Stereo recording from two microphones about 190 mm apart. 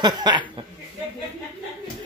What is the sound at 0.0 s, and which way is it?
Speech, 25° right (ahead or behind).